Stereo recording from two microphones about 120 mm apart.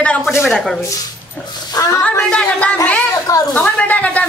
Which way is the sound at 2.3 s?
10° left (ahead or behind).